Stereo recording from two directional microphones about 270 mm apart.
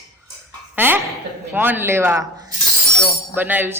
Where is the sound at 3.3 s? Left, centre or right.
Centre.